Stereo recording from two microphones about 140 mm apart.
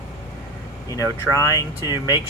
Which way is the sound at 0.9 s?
25° left (ahead or behind).